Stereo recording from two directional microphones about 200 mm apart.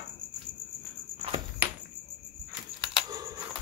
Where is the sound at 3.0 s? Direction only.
20° right (ahead or behind).